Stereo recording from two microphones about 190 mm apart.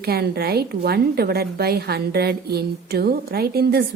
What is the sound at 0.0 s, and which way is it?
A woman's voice, 55° right (ahead or behind).